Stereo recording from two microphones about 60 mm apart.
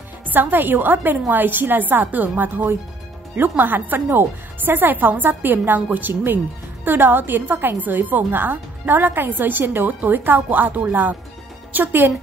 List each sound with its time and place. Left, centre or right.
0.3 s a woman's voice: right